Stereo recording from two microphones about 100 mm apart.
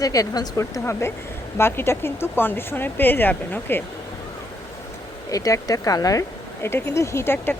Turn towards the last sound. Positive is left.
turn(degrees=20)  # may be behind; listen again after turning